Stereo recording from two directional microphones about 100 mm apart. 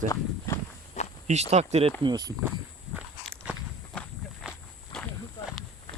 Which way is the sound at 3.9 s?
10° left (ahead or behind).